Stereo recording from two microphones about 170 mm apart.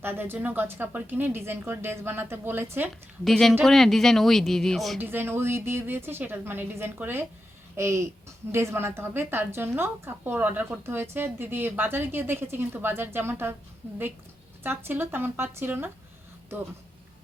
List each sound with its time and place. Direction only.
0.0 s a woman's voice: 10° right (ahead or behind)
3.2 s speech: centre (ahead or behind)
4.9 s a woman's voice: 10° right (ahead or behind)
14.6 s a woman's voice: 10° right (ahead or behind)